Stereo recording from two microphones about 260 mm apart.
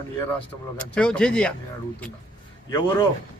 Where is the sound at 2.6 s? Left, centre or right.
Centre.